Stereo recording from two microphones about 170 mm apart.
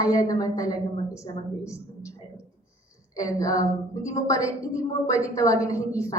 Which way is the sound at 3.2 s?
20° left (ahead or behind).